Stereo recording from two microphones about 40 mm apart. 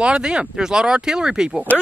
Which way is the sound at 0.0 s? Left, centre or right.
Right.